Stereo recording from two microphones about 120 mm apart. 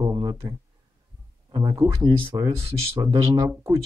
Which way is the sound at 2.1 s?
40° right (ahead or behind).